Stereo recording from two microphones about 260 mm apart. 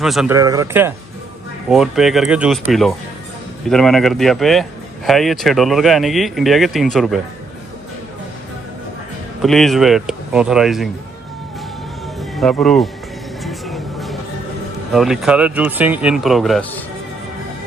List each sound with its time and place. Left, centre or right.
0.0 s speech: centre
0.3 s speech: centre
9.4 s speech: centre
12.4 s speech: centre
13.4 s music: centre
14.9 s speech: centre